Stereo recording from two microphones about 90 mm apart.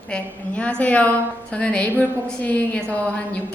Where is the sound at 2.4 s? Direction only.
15° left (ahead or behind).